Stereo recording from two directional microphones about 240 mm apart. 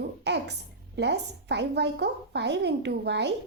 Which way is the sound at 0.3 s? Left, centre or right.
Right.